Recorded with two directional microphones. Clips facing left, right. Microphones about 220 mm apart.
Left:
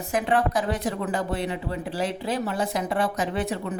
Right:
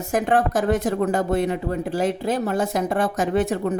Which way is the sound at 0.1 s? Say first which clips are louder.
Right 3 dB; 45° right (ahead or behind).